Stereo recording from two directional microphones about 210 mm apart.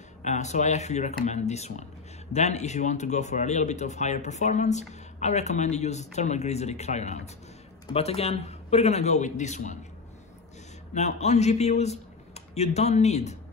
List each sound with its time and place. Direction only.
0.2 s speech: 35° left (ahead or behind)
11.0 s a man's voice: 30° left (ahead or behind)